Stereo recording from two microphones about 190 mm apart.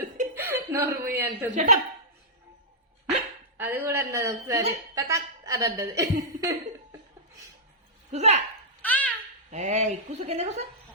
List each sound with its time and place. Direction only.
0.3 s chuckle: 15° right (ahead or behind)
1.5 s speech: 40° right (ahead or behind)
3.6 s a woman's voice: 10° right (ahead or behind)
8.1 s speech: 35° right (ahead or behind)
8.8 s babbling: 10° left (ahead or behind)
9.5 s speech: 40° right (ahead or behind)